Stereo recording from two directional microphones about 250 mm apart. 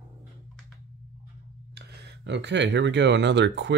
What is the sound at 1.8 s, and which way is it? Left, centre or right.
Speech, right.